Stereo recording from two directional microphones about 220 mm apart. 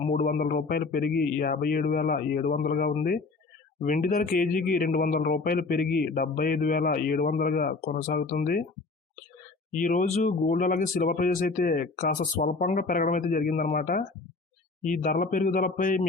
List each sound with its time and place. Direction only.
0.0 s speech: 35° left (ahead or behind)
9.7 s speech: 35° left (ahead or behind)